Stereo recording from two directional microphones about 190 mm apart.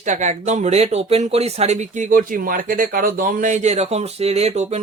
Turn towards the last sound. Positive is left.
turn(degrees=-35)  # may be behind; listen again after turning